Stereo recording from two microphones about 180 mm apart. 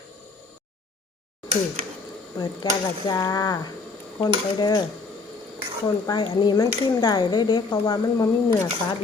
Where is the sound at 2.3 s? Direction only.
25° left (ahead or behind).